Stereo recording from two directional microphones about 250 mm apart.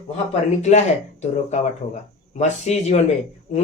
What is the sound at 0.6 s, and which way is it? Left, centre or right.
Speech, left.